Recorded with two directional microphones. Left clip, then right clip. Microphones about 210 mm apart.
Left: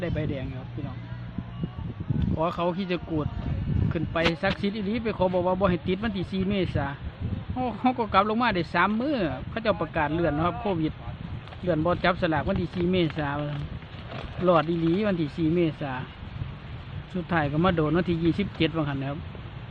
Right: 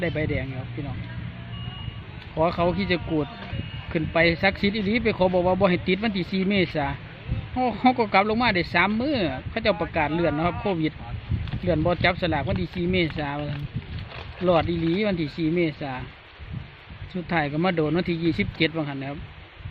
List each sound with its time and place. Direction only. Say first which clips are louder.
0.0 s speech: right 5 dB; 5° right (ahead or behind)
2.4 s speech: right 5 dB; centre (ahead or behind)
17.2 s speech: right 1 dB; 5° right (ahead or behind)